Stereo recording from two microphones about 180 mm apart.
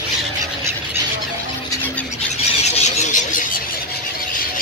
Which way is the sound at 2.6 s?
40° left (ahead or behind).